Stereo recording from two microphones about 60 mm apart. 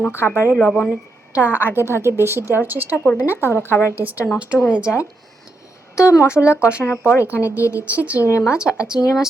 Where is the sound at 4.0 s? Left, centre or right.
Right.